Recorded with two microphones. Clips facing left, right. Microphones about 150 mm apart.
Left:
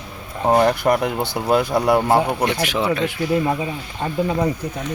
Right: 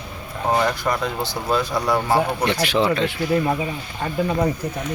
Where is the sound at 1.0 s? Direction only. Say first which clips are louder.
Left 3 dB; 15° left (ahead or behind).